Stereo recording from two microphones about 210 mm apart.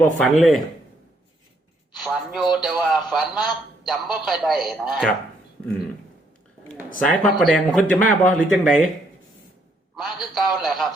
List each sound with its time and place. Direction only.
0.0 s speech: centre (ahead or behind)
2.0 s speech: centre (ahead or behind)
7.2 s speech: centre (ahead or behind)
9.9 s speech: centre (ahead or behind)